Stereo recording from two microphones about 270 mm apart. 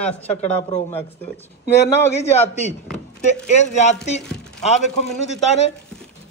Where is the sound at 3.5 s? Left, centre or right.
Left.